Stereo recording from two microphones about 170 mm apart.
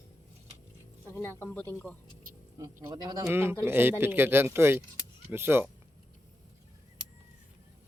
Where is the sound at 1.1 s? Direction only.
15° left (ahead or behind).